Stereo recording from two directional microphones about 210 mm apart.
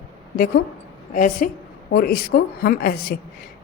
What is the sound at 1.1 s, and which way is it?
A woman's voice, 40° left (ahead or behind).